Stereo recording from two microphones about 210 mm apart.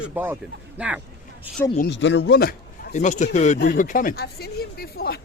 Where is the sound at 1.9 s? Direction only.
60° left (ahead or behind).